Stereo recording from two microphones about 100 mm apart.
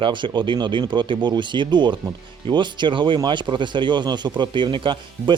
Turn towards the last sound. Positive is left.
turn(degrees=-55)  # may be behind; listen again after turning